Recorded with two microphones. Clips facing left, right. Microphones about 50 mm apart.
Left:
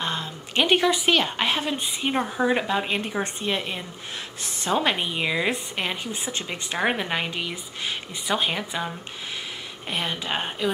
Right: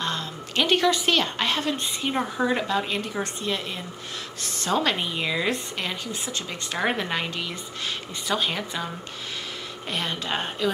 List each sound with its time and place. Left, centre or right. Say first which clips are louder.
0.0 s a woman's voice: even; centre